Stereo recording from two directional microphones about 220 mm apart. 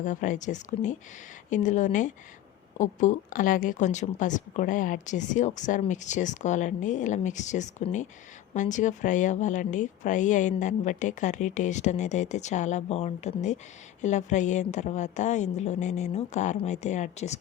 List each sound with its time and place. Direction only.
0.0 s speech: 35° left (ahead or behind)